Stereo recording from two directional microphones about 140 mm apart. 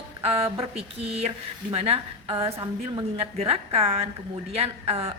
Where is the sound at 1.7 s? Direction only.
40° right (ahead or behind).